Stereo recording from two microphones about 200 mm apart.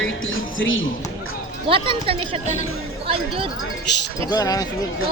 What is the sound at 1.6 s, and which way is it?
Speech, 25° right (ahead or behind).